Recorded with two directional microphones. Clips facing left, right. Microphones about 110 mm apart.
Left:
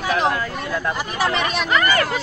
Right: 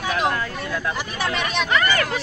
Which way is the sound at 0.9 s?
40° left (ahead or behind).